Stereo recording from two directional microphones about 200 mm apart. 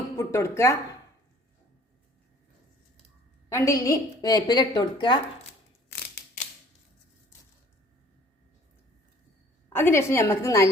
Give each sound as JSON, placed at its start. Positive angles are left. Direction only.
{"t": 0.2, "sound": "a woman's voice", "side_deg": 15}
{"t": 3.5, "sound": "a woman's voice", "side_deg": 15}
{"t": 9.7, "sound": "a woman's voice", "side_deg": 10}